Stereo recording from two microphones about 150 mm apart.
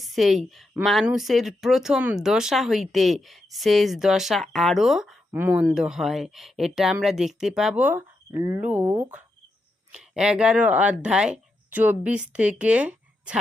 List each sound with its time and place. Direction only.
0.0 s a woman's voice: centre (ahead or behind)
5.3 s speech: 15° right (ahead or behind)